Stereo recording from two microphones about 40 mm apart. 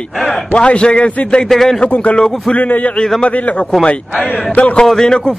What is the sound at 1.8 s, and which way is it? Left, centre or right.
Speech, left.